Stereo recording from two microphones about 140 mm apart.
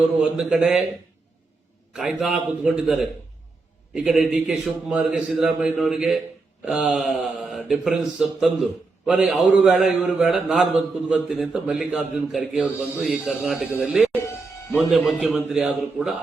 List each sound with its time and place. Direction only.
0.2 s a man's voice: centre (ahead or behind)
1.9 s a man's voice: 5° right (ahead or behind)